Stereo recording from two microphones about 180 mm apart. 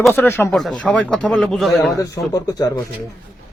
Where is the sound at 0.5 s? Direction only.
Centre (ahead or behind).